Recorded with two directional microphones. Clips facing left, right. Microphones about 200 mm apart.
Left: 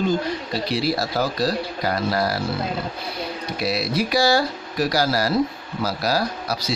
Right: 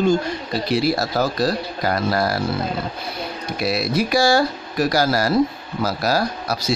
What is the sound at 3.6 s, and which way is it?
A man's voice, 50° right (ahead or behind).